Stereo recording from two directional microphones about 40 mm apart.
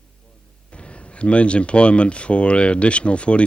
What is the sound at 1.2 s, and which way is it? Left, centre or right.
Speech, left.